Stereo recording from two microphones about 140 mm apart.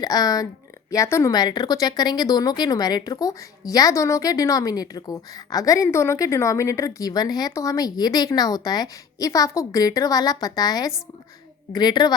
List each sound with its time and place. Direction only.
0.0 s a woman's voice: 25° left (ahead or behind)